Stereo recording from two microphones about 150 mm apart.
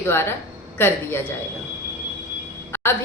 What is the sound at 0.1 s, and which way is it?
A woman's voice, 15° left (ahead or behind).